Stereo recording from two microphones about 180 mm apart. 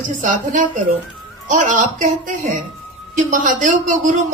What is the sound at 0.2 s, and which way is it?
Speech, 45° right (ahead or behind).